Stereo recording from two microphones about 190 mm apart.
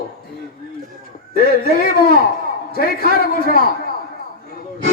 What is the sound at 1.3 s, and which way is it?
A man's voice, 50° left (ahead or behind).